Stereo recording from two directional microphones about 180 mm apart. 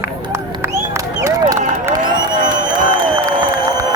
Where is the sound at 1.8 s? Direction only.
25° right (ahead or behind).